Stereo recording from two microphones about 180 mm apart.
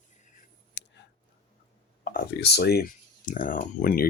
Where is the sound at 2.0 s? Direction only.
55° left (ahead or behind).